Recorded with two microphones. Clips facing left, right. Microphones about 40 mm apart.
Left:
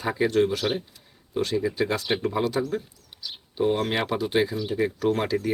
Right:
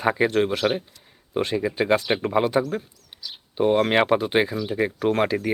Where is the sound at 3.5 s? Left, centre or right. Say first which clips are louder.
Right 5 dB; right.